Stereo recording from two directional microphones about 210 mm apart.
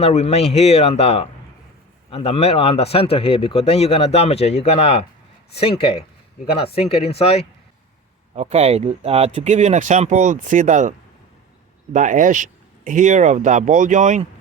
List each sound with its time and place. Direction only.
0.0 s speech: 30° left (ahead or behind)
8.4 s speech: 30° right (ahead or behind)
11.9 s speech: 35° right (ahead or behind)